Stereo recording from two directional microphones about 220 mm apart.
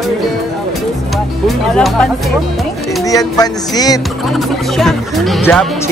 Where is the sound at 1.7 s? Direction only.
5° left (ahead or behind).